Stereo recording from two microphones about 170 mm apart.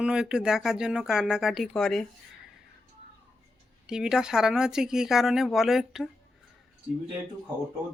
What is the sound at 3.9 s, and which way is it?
Speech, 5° right (ahead or behind).